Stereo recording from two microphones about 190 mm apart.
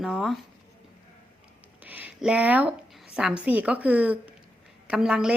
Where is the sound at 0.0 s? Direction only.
Centre (ahead or behind).